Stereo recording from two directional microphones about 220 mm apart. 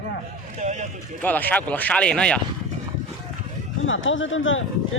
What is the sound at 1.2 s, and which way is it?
Speech, 5° left (ahead or behind).